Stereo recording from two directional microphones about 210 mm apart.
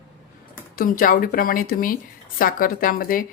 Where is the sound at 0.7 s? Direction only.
40° left (ahead or behind).